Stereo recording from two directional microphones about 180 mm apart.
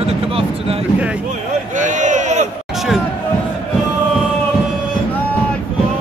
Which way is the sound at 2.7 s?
Centre (ahead or behind).